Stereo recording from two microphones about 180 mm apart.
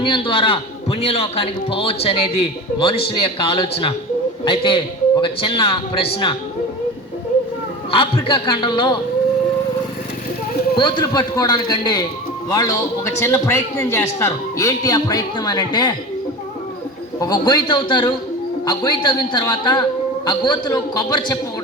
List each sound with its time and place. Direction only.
0.0 s a man's voice: 30° left (ahead or behind)
7.9 s a man's voice: 30° left (ahead or behind)
10.8 s a man's voice: 25° left (ahead or behind)
17.2 s a man's voice: 25° left (ahead or behind)